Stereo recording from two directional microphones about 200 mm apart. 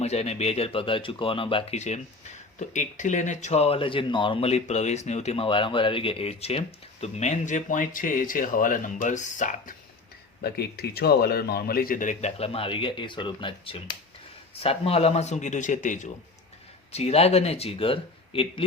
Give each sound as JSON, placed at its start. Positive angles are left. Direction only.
{"t": 0.0, "sound": "speech", "side_deg": 30}
{"t": 10.4, "sound": "speech", "side_deg": 50}